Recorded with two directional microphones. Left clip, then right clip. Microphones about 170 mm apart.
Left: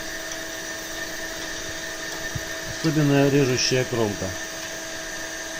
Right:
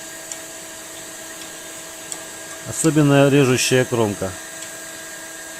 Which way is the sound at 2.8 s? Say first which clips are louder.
Right 6 dB; 60° right (ahead or behind).